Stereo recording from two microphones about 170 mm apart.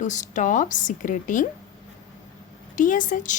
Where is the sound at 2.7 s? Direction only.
50° left (ahead or behind).